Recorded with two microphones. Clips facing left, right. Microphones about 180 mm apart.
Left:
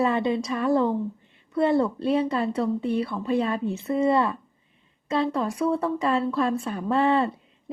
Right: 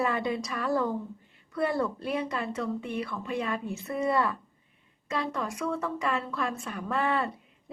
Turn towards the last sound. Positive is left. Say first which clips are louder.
# left 7 dB
turn(degrees=25)  # may be behind; listen again after turning